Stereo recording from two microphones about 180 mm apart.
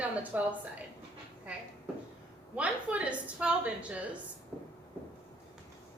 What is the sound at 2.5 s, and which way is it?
A woman's voice, 5° right (ahead or behind).